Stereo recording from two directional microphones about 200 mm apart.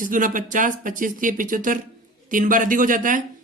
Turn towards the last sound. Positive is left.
turn(degrees=-40)  # may be behind; listen again after turning